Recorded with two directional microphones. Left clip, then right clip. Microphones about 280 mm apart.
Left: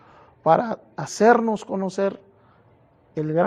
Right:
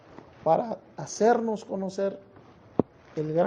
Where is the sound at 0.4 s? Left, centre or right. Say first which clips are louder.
Left 6 dB; left.